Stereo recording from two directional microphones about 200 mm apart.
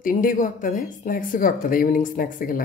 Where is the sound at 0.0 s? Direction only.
40° left (ahead or behind).